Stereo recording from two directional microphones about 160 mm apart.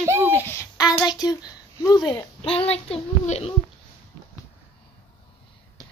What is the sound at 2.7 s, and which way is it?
Speech, 40° left (ahead or behind).